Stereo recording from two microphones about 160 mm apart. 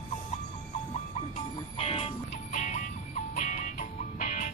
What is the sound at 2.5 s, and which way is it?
Music, 50° left (ahead or behind).